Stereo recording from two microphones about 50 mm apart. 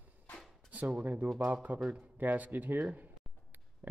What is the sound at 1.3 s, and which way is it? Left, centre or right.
Speech, right.